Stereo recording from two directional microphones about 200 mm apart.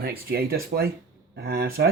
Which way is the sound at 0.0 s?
50° right (ahead or behind).